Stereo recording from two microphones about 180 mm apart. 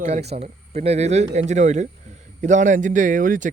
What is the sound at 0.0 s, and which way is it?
Speech, 35° right (ahead or behind).